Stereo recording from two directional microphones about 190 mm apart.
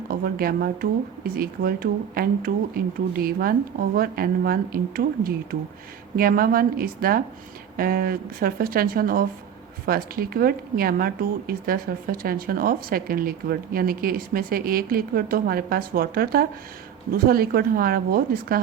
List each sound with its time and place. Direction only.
0.1 s a woman's voice: 50° right (ahead or behind)